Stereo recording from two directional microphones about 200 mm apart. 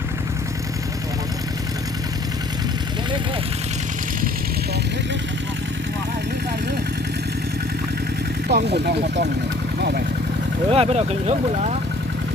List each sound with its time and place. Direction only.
8.4 s speech: 55° right (ahead or behind)
10.7 s speech: 30° right (ahead or behind)